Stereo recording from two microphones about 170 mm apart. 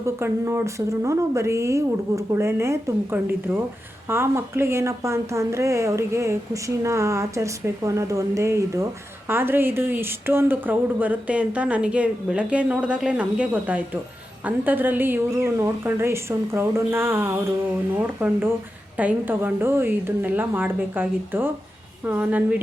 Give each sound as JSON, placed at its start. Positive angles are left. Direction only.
{"t": 0.0, "sound": "speech", "side_deg": -15}